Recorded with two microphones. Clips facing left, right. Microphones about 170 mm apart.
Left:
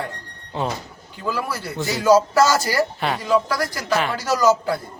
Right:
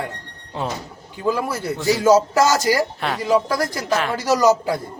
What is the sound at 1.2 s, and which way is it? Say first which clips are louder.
Speech: right 4 dB; 20° right (ahead or behind).